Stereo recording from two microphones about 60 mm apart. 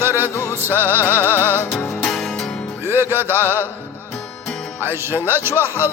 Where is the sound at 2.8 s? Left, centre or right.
Right.